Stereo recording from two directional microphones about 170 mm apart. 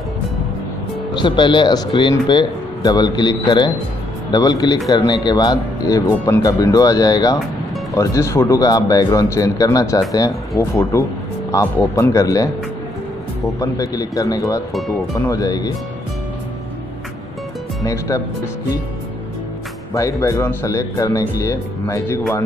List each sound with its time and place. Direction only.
1.1 s speech: 25° left (ahead or behind)
13.6 s speech: 20° left (ahead or behind)
17.8 s speech: 20° left (ahead or behind)
19.9 s speech: 20° left (ahead or behind)